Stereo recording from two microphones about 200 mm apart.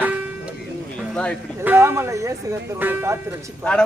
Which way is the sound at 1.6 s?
10° right (ahead or behind).